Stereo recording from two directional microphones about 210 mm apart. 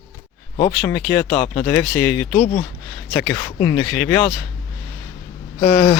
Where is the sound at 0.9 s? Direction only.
5° left (ahead or behind).